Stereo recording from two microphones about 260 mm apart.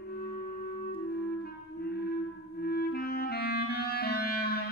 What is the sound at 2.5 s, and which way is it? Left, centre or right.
Clarinet, left.